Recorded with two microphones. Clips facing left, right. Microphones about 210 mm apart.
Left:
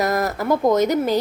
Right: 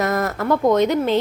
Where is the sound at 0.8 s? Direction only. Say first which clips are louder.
Right 1 dB; 40° left (ahead or behind).